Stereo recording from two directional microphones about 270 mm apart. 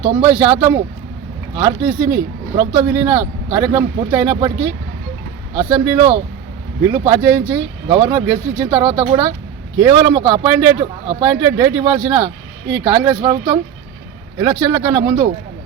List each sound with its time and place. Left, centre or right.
0.0 s speech: centre
5.5 s speech: centre